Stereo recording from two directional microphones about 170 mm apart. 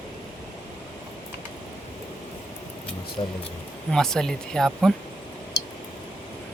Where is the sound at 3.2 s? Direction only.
30° left (ahead or behind).